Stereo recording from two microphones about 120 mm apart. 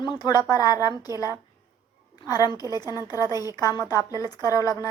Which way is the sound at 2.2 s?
30° left (ahead or behind).